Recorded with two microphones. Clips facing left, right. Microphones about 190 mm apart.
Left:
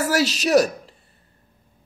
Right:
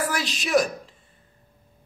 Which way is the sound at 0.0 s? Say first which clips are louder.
Left 7 dB; 40° left (ahead or behind).